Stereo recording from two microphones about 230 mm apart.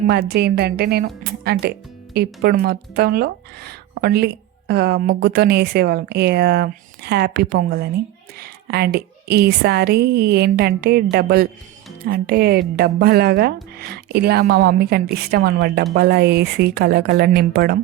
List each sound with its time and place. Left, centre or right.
0.1 s a woman's voice: right